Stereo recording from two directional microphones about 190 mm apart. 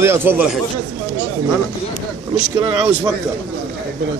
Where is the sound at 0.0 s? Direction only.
10° right (ahead or behind).